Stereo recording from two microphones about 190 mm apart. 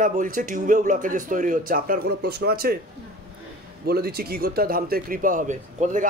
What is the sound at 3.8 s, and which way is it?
A man's voice, 55° right (ahead or behind).